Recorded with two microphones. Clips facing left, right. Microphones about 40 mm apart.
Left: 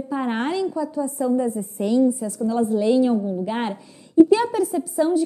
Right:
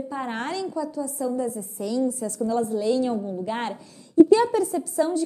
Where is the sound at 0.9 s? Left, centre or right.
Left.